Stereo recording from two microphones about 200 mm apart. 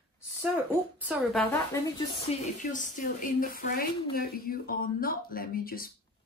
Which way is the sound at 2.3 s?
30° left (ahead or behind).